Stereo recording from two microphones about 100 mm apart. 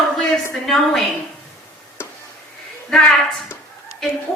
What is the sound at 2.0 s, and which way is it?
Chop, 25° left (ahead or behind).